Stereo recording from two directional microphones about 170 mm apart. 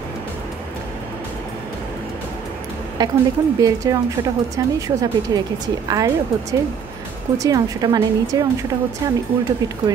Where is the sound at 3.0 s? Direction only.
25° right (ahead or behind).